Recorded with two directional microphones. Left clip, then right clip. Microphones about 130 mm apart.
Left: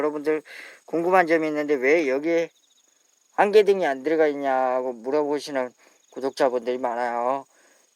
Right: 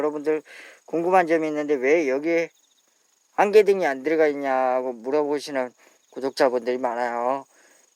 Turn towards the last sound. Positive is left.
turn(degrees=-15)  # may be behind; listen again after turning